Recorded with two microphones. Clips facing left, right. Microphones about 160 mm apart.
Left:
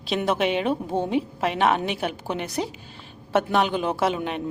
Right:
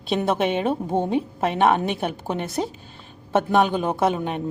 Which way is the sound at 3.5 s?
45° right (ahead or behind).